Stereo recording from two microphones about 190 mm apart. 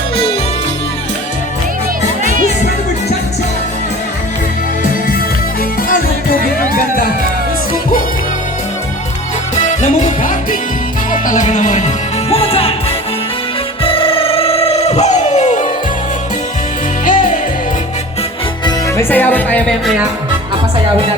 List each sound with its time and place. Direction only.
6.6 s music: 45° left (ahead or behind)
9.6 s music: 40° left (ahead or behind)
13.8 s a sound: 30° left (ahead or behind)
17.1 s music: 45° left (ahead or behind)
18.6 s music: 10° left (ahead or behind)